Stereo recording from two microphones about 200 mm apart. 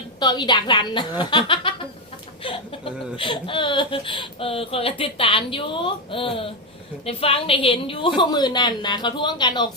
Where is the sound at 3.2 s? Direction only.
25° left (ahead or behind).